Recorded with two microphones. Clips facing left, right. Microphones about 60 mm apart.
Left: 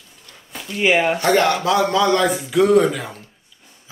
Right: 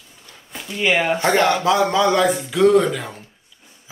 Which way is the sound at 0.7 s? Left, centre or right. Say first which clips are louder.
Left 2 dB; centre.